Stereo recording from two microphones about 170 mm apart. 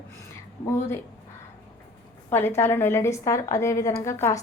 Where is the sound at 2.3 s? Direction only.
15° left (ahead or behind).